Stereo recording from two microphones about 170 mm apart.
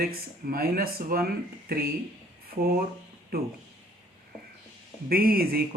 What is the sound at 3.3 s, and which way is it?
Speech, 60° right (ahead or behind).